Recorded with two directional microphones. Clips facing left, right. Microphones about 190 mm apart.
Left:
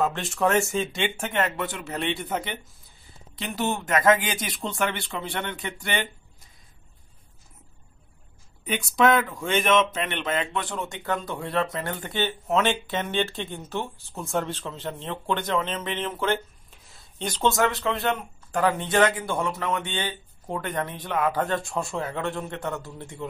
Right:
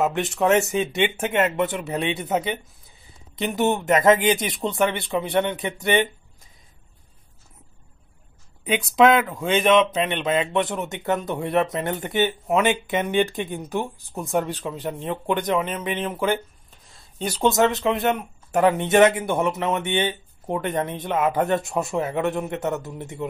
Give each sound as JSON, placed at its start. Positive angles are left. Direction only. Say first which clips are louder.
{"t": 0.0, "sound": "a man's voice", "louder": "right 3 dB", "side_deg": -20}
{"t": 8.7, "sound": "a man's voice", "louder": "right 4 dB", "side_deg": -20}
{"t": 16.7, "sound": "a sound", "louder": "right 4 dB", "side_deg": -5}
{"t": 17.5, "sound": "a man's voice", "louder": "right 4 dB", "side_deg": -20}